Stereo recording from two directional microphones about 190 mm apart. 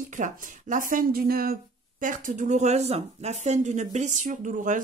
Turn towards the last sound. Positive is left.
turn(degrees=-40)  # may be behind; listen again after turning